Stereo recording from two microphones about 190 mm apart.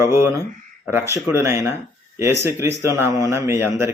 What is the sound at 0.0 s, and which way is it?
Speech, 10° right (ahead or behind).